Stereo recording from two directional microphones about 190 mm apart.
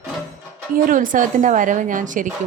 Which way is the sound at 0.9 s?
45° right (ahead or behind).